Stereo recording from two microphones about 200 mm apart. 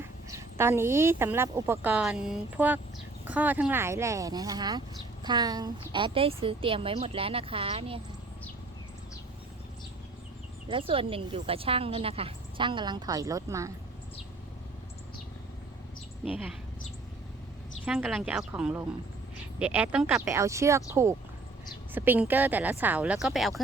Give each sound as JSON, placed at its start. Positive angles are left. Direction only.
{"t": 0.0, "sound": "a woman's voice", "side_deg": -15}
{"t": 10.7, "sound": "speech", "side_deg": -25}
{"t": 16.2, "sound": "speech", "side_deg": -5}
{"t": 17.8, "sound": "a woman's voice", "side_deg": 0}